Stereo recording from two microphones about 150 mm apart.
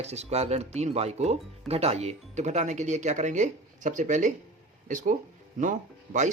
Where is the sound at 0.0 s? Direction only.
45° right (ahead or behind).